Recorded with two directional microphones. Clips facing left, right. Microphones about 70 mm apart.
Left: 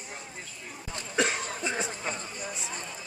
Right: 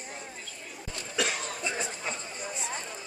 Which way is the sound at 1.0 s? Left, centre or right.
Left.